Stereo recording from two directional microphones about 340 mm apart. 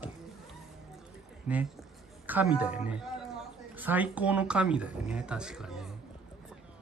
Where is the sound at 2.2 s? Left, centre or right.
Centre.